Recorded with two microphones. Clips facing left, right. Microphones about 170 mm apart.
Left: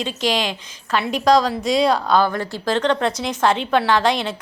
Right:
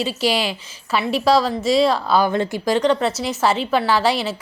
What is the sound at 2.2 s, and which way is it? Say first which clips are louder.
Speech: right 3 dB; 20° right (ahead or behind).